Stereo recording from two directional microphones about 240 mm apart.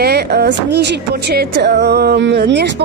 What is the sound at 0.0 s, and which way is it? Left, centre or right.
Speech, right.